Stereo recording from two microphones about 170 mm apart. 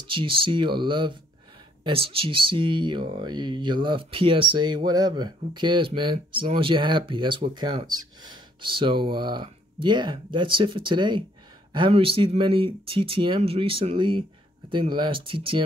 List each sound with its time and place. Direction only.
0.0 s speech: 30° right (ahead or behind)